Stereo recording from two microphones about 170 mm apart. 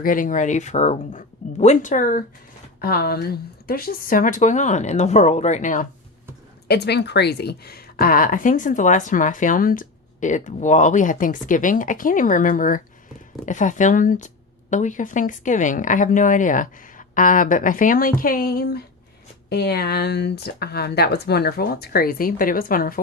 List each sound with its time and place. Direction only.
0.0 s speech: 50° left (ahead or behind)
2.8 s speech: 65° left (ahead or behind); by 5.9 s 50° left (ahead or behind)
6.7 s speech: 75° left (ahead or behind); by 23.0 s 60° left (ahead or behind)